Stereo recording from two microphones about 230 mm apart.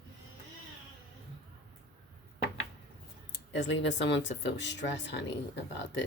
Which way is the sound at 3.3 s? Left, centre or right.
Left.